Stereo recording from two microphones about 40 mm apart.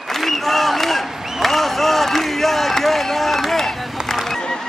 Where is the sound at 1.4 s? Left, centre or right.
Centre.